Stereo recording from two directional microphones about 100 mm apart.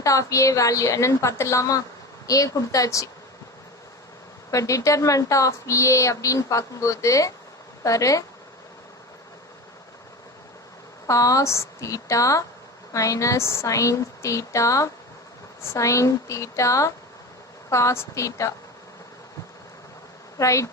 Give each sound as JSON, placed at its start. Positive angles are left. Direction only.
{"t": 0.0, "sound": "speech", "side_deg": 35}
{"t": 4.5, "sound": "speech", "side_deg": 35}
{"t": 11.0, "sound": "speech", "side_deg": 35}
{"t": 20.4, "sound": "speech", "side_deg": 30}